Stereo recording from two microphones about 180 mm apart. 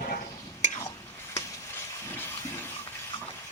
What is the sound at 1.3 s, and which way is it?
Water, 15° left (ahead or behind).